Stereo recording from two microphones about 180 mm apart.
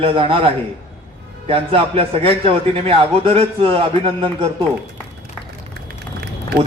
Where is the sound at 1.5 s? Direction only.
30° right (ahead or behind).